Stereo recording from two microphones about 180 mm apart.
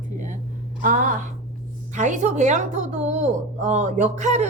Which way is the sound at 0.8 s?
50° right (ahead or behind).